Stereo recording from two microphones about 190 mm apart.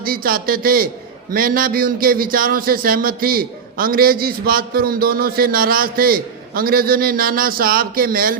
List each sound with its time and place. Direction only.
0.0 s a man's voice: 50° right (ahead or behind)